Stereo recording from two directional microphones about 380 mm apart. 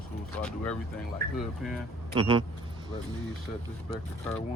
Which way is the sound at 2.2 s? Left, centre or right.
Centre.